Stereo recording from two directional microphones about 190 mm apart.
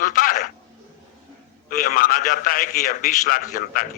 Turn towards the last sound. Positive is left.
turn(degrees=50)  # may be behind; listen again after turning